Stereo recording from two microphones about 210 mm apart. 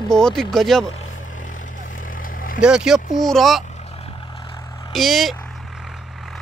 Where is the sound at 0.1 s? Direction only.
Centre (ahead or behind).